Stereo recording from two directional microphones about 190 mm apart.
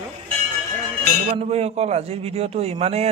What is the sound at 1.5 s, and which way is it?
A man's voice, 35° right (ahead or behind).